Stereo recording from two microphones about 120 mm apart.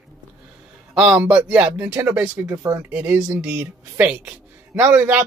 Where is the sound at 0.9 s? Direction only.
10° right (ahead or behind).